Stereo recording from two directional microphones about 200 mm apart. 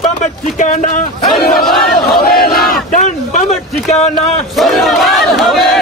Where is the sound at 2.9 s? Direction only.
40° left (ahead or behind).